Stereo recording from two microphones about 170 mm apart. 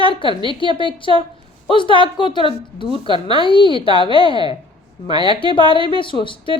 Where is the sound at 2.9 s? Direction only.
25° right (ahead or behind).